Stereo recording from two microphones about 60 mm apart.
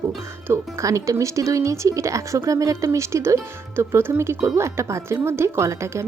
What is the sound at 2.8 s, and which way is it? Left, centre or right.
A woman's voice, right.